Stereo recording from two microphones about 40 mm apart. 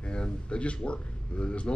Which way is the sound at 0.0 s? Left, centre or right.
Left.